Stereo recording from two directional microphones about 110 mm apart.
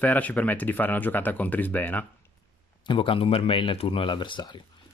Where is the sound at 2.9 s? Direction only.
50° left (ahead or behind).